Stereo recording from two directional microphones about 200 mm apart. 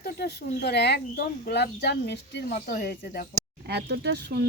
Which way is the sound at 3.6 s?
55° right (ahead or behind).